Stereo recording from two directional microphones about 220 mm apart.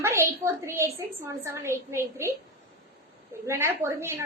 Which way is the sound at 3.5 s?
10° right (ahead or behind).